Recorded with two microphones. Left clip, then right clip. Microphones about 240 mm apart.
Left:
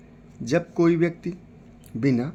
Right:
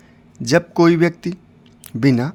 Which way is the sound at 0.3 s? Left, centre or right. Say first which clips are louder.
Right 8 dB; right.